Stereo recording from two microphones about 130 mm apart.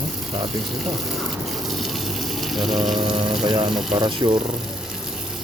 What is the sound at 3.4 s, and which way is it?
Speech, 35° right (ahead or behind).